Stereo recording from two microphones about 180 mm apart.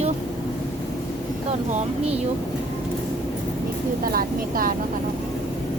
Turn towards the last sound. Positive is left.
turn(degrees=-55)  # may be behind; listen again after turning